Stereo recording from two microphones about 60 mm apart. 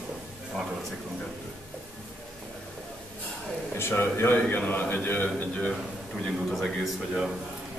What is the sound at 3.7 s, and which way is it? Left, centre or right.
A man's voice, left.